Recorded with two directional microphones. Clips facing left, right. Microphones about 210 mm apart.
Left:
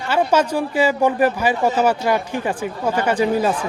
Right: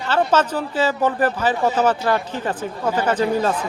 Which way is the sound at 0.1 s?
10° left (ahead or behind).